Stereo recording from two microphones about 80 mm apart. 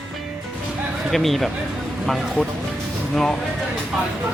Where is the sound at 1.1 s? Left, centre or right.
Centre.